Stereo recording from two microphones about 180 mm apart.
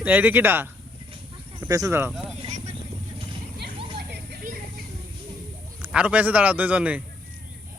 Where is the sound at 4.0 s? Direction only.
65° right (ahead or behind).